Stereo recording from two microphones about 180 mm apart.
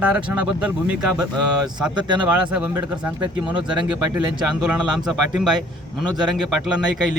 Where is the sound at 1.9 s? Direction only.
25° right (ahead or behind).